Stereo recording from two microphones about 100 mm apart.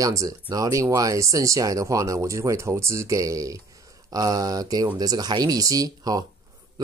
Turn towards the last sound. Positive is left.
turn(degrees=-40)  # may be behind; listen again after turning